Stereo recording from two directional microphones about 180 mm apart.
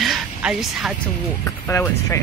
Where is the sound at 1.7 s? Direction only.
15° left (ahead or behind).